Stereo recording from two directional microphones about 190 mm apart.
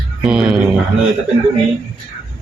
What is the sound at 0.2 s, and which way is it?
Speech, 5° right (ahead or behind).